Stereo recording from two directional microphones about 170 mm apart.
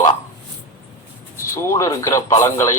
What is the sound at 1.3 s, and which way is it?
A man's voice, 15° left (ahead or behind).